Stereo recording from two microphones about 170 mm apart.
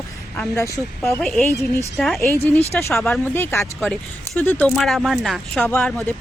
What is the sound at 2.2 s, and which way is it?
Speech, 15° left (ahead or behind).